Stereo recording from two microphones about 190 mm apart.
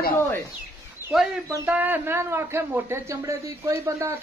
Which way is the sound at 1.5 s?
10° right (ahead or behind).